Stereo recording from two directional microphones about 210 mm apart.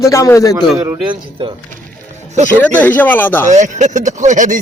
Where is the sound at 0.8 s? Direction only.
20° right (ahead or behind).